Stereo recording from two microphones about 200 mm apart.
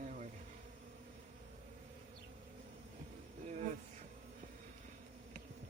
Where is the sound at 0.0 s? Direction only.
40° right (ahead or behind).